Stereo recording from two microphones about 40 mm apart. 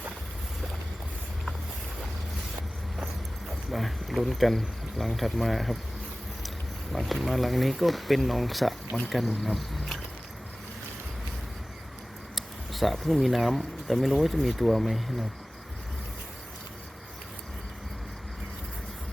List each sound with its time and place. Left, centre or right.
3.7 s speech: centre
6.9 s speech: centre
9.4 s a sound: centre
12.3 s speech: centre